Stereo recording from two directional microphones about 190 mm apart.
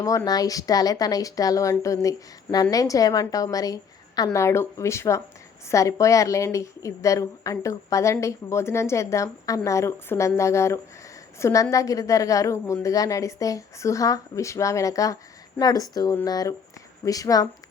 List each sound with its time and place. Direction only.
0.3 s a woman's voice: 20° left (ahead or behind)